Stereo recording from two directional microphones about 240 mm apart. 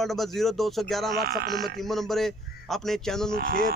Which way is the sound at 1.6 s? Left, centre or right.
Centre.